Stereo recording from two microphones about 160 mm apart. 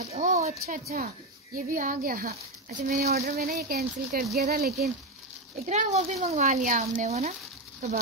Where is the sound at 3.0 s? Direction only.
75° right (ahead or behind).